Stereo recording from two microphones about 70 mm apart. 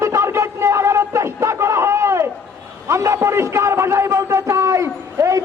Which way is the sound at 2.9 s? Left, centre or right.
Right.